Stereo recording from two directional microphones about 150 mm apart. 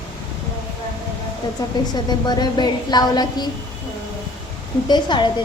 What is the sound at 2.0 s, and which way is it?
A woman's voice, 30° left (ahead or behind).